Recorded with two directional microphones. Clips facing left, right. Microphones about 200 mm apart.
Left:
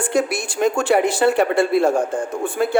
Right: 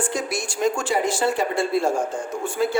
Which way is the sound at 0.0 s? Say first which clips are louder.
Left 6 dB; 60° left (ahead or behind).